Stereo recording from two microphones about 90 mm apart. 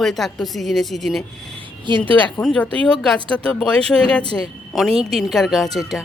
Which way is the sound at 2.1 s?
20° left (ahead or behind).